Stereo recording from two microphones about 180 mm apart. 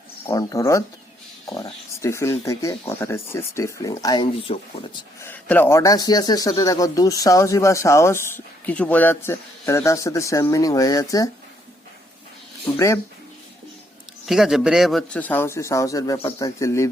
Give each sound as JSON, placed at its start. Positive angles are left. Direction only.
{"t": 0.3, "sound": "speech", "side_deg": 15}
{"t": 2.0, "sound": "speech", "side_deg": 15}
{"t": 5.2, "sound": "speech", "side_deg": 10}
{"t": 12.7, "sound": "speech", "side_deg": 10}
{"t": 14.3, "sound": "speech", "side_deg": 0}